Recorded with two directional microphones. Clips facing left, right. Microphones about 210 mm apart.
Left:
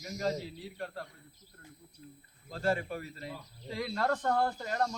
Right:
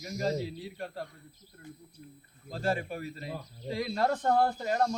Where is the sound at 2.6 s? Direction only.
25° right (ahead or behind).